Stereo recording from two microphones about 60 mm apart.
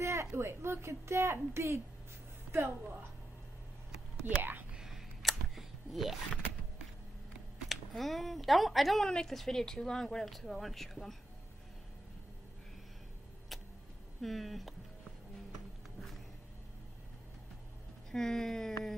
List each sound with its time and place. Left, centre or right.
0.0 s a woman's voice: right
4.4 s speech: right
4.7 s a sound: centre
7.5 s speech: centre
13.5 s vehicle: centre
14.2 s speech: centre
18.1 s speech: centre